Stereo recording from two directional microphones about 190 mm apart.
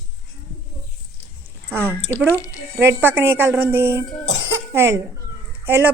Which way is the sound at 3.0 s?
10° right (ahead or behind).